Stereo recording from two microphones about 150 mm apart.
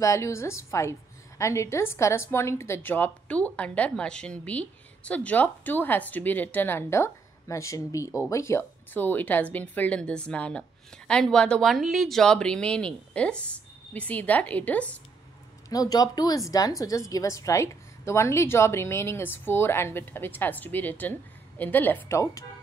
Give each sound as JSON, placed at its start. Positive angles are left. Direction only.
{"t": 0.0, "sound": "a woman's voice", "side_deg": 20}
{"t": 15.7, "sound": "a woman's voice", "side_deg": 25}